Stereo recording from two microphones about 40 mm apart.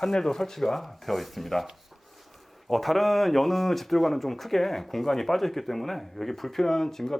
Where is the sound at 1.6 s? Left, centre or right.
Centre.